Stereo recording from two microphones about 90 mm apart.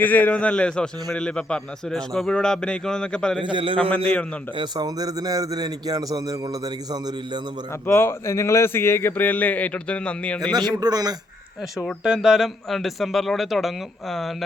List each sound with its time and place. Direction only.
0.0 s a man's voice: 20° left (ahead or behind)
3.4 s a man's voice: 70° right (ahead or behind)
3.8 s a man's voice: 15° left (ahead or behind)
4.5 s a man's voice: 55° right (ahead or behind)
7.9 s speech: 30° left (ahead or behind); by 10.5 s 15° left (ahead or behind)
10.5 s a man's voice: 50° right (ahead or behind)
12.0 s speech: 5° right (ahead or behind)